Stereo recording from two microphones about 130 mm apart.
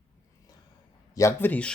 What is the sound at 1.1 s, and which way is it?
Speech, 25° left (ahead or behind).